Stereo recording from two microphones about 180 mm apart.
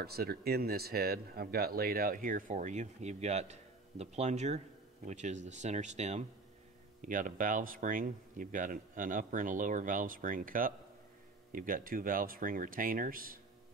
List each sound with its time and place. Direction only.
0.0 s speech: 60° right (ahead or behind)